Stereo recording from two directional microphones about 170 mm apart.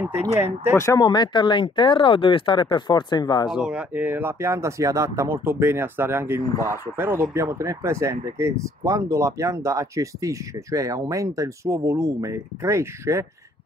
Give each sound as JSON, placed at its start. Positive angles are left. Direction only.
{"t": 0.0, "sound": "speech", "side_deg": -15}
{"t": 0.7, "sound": "speech", "side_deg": 20}
{"t": 3.4, "sound": "speech", "side_deg": -5}